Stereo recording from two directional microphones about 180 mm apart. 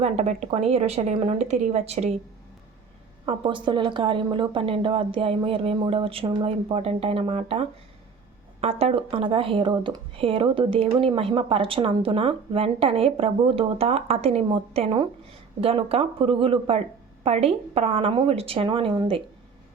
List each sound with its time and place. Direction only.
0.0 s speech: 40° right (ahead or behind)
3.2 s speech: 25° right (ahead or behind)